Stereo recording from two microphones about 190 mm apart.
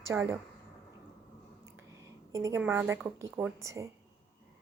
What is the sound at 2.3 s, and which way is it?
A woman's voice, 15° right (ahead or behind).